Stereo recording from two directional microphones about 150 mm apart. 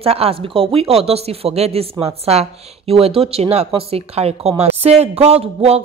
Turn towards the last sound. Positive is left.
turn(degrees=-40)  # may be behind; listen again after turning